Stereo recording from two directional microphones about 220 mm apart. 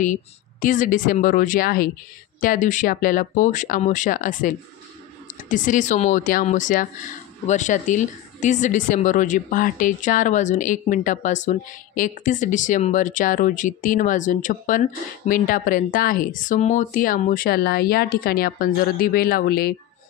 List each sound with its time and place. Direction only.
0.0 s speech: 35° left (ahead or behind)